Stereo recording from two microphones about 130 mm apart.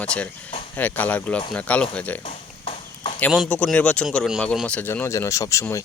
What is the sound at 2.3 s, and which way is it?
Clip-clop, 50° left (ahead or behind).